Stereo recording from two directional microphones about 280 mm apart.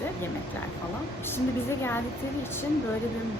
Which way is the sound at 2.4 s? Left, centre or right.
Centre.